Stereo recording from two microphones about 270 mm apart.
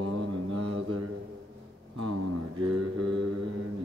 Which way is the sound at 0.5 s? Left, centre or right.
Right.